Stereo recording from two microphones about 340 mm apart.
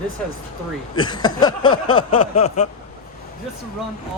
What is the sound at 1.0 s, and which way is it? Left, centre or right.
Speech, centre.